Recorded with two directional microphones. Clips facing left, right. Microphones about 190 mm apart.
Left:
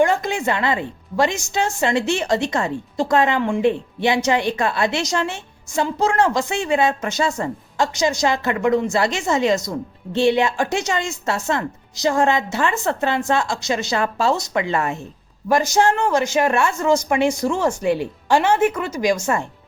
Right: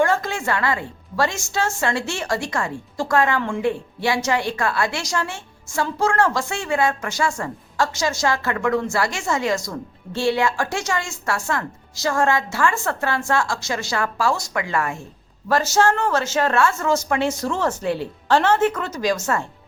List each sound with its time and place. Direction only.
0.0 s a woman's voice: 15° left (ahead or behind)